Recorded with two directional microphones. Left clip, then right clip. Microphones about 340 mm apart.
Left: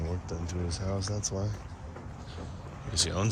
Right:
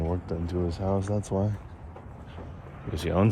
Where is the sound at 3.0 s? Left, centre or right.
Centre.